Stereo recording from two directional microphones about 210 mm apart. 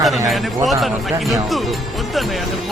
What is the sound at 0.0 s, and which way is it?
Speech, centre (ahead or behind).